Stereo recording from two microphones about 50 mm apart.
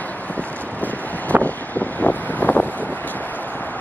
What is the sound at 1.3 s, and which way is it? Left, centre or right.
Wind noise, right.